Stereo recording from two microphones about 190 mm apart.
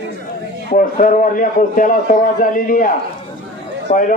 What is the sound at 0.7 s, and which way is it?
A man's voice, 45° left (ahead or behind).